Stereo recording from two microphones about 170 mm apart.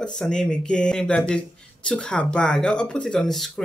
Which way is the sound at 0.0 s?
5° left (ahead or behind).